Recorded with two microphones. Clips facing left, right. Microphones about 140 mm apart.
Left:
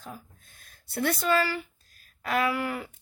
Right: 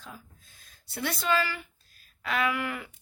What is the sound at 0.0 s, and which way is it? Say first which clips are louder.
Speech: left 4 dB; 55° left (ahead or behind).